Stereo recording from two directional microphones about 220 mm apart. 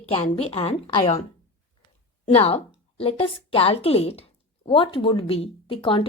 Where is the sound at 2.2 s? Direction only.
30° left (ahead or behind).